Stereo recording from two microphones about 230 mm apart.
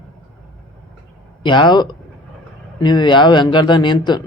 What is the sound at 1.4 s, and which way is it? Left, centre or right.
A man's voice, centre.